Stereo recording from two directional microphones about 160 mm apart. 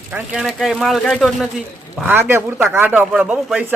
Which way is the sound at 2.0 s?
10° right (ahead or behind).